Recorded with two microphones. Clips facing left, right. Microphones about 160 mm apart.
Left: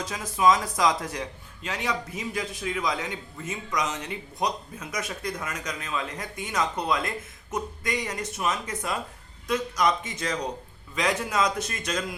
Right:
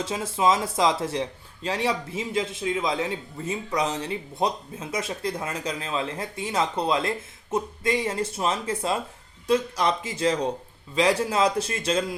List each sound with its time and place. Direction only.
0.0 s speech: 30° right (ahead or behind)